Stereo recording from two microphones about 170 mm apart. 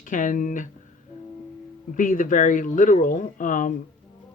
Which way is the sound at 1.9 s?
50° left (ahead or behind).